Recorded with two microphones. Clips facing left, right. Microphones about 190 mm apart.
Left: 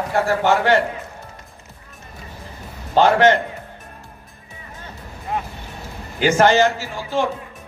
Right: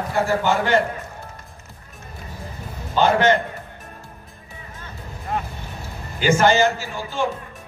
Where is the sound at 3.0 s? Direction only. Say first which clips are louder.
Left 3 dB; 70° left (ahead or behind).